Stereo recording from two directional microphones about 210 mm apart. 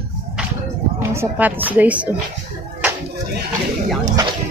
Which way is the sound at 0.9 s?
10° right (ahead or behind).